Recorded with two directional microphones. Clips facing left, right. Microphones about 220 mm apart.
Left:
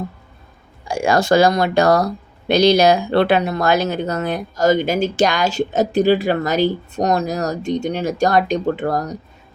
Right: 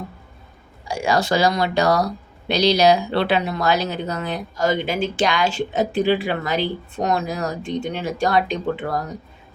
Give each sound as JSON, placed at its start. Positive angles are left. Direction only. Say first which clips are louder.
{"t": 0.9, "sound": "speech", "louder": "left 4 dB", "side_deg": 50}